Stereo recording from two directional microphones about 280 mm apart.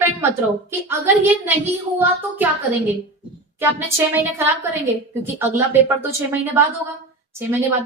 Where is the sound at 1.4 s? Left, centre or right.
Centre.